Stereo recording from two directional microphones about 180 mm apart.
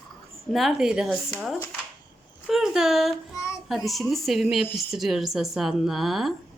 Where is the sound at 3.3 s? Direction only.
15° left (ahead or behind).